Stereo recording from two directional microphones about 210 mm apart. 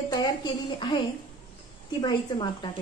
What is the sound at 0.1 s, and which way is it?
A woman's voice, 20° left (ahead or behind).